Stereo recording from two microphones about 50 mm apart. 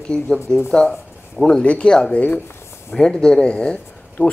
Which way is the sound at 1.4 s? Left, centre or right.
Centre.